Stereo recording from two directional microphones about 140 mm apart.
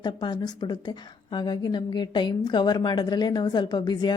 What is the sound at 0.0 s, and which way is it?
A woman's voice, 30° left (ahead or behind).